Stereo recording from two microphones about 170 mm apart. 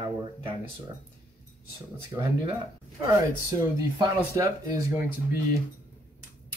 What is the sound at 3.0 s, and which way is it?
Speech, 20° right (ahead or behind).